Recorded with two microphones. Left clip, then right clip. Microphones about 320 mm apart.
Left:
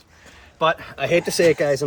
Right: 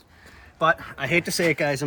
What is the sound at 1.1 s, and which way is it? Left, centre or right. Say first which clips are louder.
Speech: left 5 dB; left.